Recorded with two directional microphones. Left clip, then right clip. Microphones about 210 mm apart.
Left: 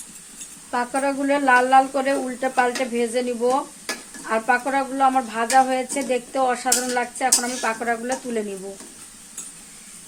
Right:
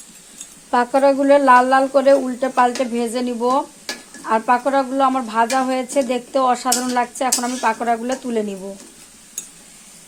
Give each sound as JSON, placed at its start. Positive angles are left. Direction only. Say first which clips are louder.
{"t": 0.7, "sound": "speech", "louder": "right 8 dB", "side_deg": -35}